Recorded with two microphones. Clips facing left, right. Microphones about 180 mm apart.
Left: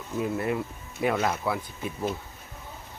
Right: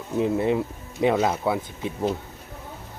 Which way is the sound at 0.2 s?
25° right (ahead or behind).